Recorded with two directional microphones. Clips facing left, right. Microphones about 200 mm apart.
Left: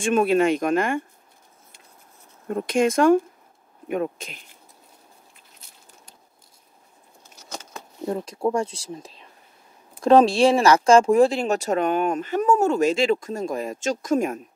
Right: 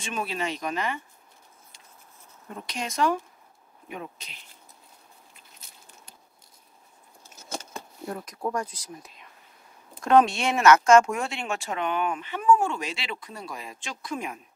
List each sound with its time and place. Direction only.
0.0 s speech: 55° left (ahead or behind)
2.4 s speech: 50° left (ahead or behind)
8.0 s speech: 25° left (ahead or behind); by 14.4 s 45° left (ahead or behind)